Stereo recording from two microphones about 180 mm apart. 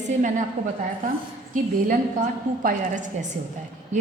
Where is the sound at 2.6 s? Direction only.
45° right (ahead or behind).